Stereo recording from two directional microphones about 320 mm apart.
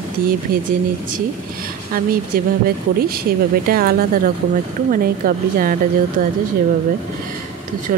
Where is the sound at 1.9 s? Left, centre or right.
Right.